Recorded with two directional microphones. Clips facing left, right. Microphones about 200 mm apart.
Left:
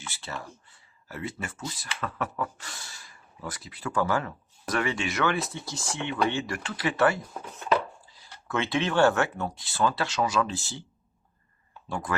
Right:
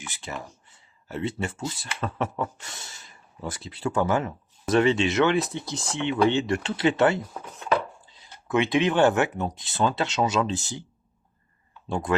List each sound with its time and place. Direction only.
0.0 s speech: 15° right (ahead or behind)
11.9 s speech: 25° right (ahead or behind)